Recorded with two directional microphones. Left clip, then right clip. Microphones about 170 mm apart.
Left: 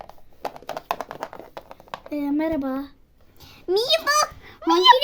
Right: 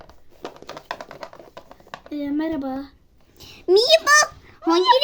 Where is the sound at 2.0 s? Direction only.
15° left (ahead or behind).